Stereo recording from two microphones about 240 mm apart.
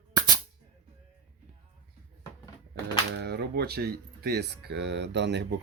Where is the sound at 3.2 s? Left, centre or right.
Right.